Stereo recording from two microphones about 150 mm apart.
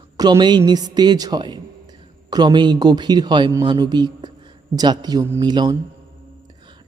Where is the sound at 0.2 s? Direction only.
30° right (ahead or behind).